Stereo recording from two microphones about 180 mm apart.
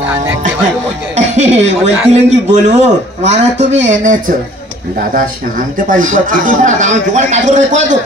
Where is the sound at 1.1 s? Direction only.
40° right (ahead or behind).